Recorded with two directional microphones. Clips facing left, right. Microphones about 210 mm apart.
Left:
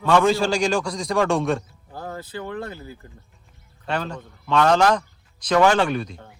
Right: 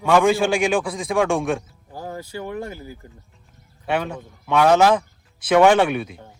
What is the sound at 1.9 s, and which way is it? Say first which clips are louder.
A man's voice: right 1 dB; 10° right (ahead or behind).